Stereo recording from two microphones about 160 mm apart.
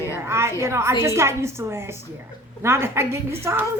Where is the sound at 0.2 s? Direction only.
15° right (ahead or behind).